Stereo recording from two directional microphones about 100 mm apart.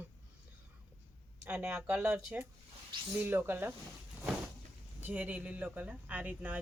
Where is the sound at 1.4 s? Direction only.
15° right (ahead or behind).